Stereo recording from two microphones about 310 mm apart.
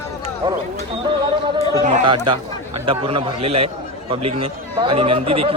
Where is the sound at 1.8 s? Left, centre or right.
Right.